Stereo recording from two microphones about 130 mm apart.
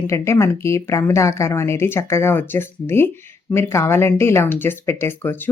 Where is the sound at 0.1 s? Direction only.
20° left (ahead or behind).